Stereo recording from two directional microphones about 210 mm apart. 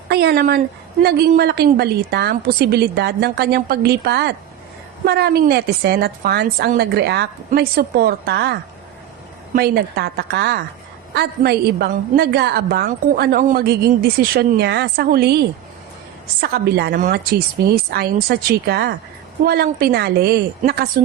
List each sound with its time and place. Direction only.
0.1 s a sound: 50° right (ahead or behind)
1.0 s a woman's voice: 50° right (ahead or behind)
9.6 s a woman's voice: 50° right (ahead or behind)